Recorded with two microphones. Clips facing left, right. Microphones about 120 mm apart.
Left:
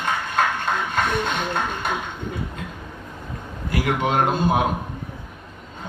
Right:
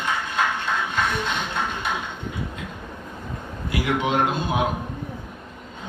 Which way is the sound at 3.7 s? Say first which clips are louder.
Left 1 dB; 45° left (ahead or behind).